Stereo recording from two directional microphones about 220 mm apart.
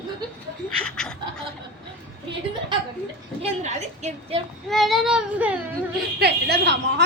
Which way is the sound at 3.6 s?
30° right (ahead or behind).